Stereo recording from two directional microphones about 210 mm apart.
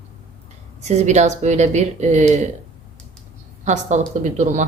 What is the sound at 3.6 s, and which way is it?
Speech, 35° right (ahead or behind).